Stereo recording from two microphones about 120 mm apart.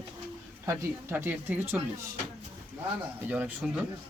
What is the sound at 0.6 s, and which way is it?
Speech, 25° right (ahead or behind).